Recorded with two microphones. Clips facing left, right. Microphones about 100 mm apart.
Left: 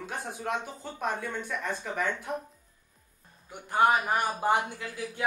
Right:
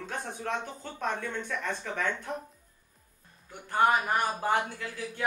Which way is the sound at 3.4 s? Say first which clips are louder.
Left 1 dB; 15° left (ahead or behind).